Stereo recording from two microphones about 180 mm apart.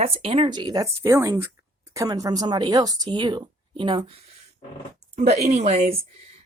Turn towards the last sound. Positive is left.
turn(degrees=-35)  # may be behind; listen again after turning